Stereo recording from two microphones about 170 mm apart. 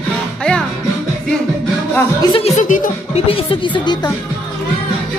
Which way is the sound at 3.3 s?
30° left (ahead or behind).